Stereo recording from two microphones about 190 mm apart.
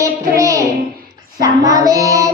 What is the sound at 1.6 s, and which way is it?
Child singing, 20° right (ahead or behind).